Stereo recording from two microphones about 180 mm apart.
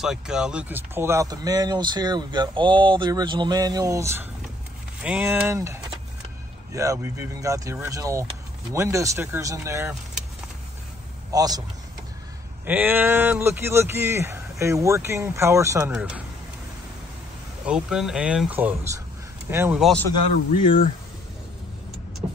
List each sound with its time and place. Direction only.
0.0 s speech: 5° right (ahead or behind)
11.3 s speech: 20° right (ahead or behind)
12.6 s speech: 10° right (ahead or behind)
17.6 s speech: 5° right (ahead or behind)
20.6 s speech: 50° left (ahead or behind)